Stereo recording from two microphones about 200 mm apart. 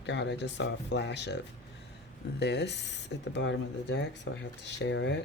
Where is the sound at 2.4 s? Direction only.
55° left (ahead or behind).